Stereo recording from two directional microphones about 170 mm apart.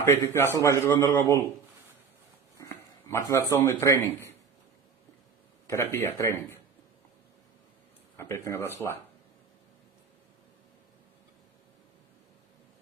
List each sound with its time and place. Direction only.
0.0 s a man's voice: 15° left (ahead or behind)
2.6 s a man's voice: 15° left (ahead or behind)
5.6 s a man's voice: 15° left (ahead or behind)
8.1 s a man's voice: 15° left (ahead or behind)